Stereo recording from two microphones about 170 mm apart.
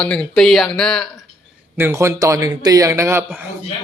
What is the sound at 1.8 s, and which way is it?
Speech, 15° right (ahead or behind).